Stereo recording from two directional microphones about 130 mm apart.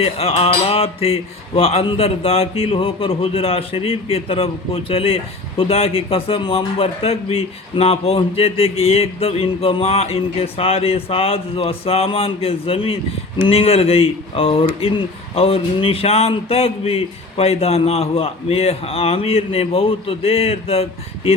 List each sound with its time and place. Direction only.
0.0 s speech: 50° left (ahead or behind)